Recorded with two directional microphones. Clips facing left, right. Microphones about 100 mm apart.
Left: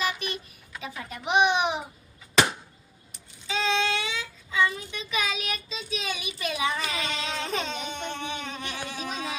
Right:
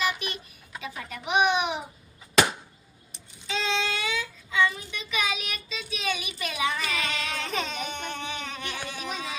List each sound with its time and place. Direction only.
0.8 s babbling: 30° left (ahead or behind)
3.4 s child singing: 30° left (ahead or behind)